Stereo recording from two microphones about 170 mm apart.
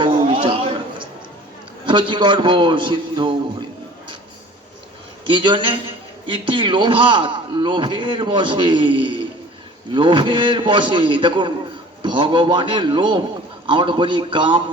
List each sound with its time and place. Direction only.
0.0 s a sound: 30° right (ahead or behind)
1.8 s a man's voice: 30° right (ahead or behind)
5.3 s a man's voice: 30° right (ahead or behind)